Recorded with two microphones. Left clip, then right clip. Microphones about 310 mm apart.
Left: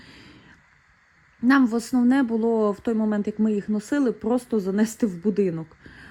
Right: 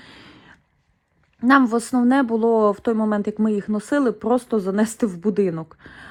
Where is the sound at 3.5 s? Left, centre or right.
Centre.